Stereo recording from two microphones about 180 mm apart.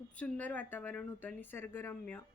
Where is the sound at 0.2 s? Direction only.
10° left (ahead or behind).